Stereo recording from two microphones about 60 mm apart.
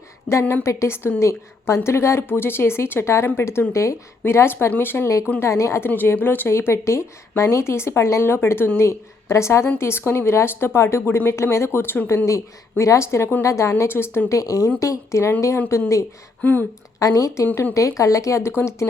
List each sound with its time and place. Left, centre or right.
0.3 s speech: left
3.7 s speech: left
4.2 s speech: left
5.4 s speech: left
5.8 s speech: left
6.5 s speech: left
13.8 s speech: left
14.3 s speech: left
14.8 s speech: left
16.4 s speech: left
17.0 s speech: left
17.4 s speech: left
17.7 s speech: left